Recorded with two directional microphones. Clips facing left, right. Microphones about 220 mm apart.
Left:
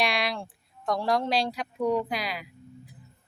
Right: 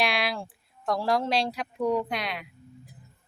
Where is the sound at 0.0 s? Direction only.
Centre (ahead or behind).